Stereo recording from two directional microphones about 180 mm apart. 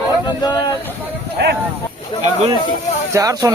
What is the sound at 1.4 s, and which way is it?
Speech, 70° right (ahead or behind).